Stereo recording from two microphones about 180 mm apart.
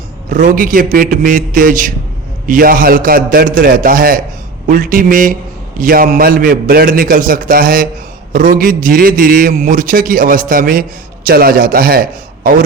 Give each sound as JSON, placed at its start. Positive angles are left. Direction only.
{"t": 0.3, "sound": "a man's voice", "side_deg": -45}